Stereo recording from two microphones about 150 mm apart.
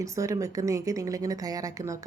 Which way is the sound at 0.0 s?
20° right (ahead or behind).